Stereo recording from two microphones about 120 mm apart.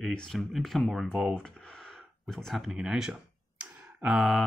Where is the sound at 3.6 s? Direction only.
5° right (ahead or behind).